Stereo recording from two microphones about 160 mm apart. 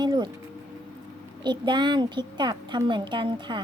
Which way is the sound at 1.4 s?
30° right (ahead or behind).